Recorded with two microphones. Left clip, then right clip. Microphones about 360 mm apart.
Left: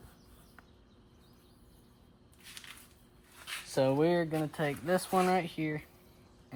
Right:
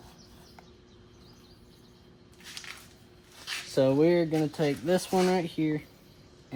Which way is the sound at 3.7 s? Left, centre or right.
Left.